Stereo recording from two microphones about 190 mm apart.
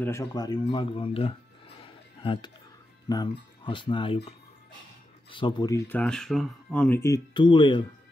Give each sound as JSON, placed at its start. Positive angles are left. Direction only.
{"t": 0.0, "sound": "speech", "side_deg": 15}
{"t": 1.8, "sound": "a sound", "side_deg": 25}
{"t": 3.1, "sound": "speech", "side_deg": 25}
{"t": 5.3, "sound": "speech", "side_deg": 25}
{"t": 7.3, "sound": "speech", "side_deg": 25}